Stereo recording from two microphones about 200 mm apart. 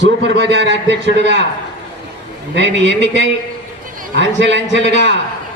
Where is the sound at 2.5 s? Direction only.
60° right (ahead or behind).